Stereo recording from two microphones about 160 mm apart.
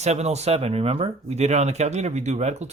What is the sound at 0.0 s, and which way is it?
Speech, 45° right (ahead or behind).